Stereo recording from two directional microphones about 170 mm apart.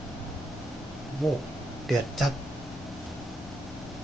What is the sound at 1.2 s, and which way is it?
Speech, centre (ahead or behind).